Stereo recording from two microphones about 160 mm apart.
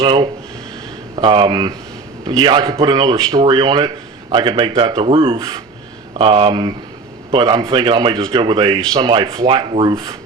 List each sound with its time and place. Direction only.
0.0 s speech: 30° right (ahead or behind)